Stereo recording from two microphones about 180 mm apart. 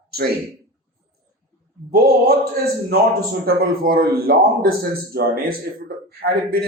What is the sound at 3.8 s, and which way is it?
A man's voice, 55° right (ahead or behind).